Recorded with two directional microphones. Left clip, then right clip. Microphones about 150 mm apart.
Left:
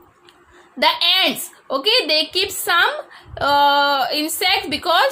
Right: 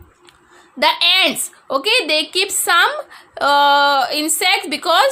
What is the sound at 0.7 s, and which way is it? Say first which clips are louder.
A woman's voice: right 2 dB; 30° right (ahead or behind).